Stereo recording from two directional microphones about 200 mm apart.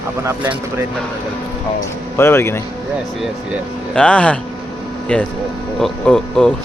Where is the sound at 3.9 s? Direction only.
5° left (ahead or behind).